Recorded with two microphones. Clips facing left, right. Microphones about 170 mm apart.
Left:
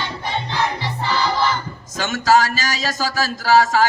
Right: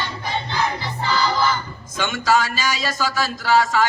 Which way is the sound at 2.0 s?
40° left (ahead or behind).